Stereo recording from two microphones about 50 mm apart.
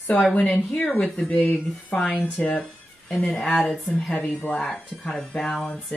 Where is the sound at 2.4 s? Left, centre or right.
Centre.